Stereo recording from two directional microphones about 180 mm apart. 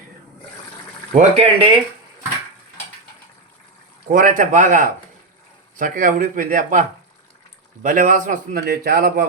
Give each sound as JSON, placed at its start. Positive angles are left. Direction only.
{"t": 1.1, "sound": "speech", "side_deg": -30}
{"t": 4.1, "sound": "a man's voice", "side_deg": -50}